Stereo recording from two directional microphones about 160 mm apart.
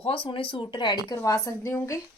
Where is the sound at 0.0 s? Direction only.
30° left (ahead or behind).